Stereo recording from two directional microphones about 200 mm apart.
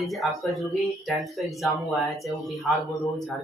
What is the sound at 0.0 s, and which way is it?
Speech, centre (ahead or behind).